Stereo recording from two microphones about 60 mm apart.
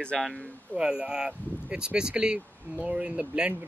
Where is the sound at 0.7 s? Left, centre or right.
Centre.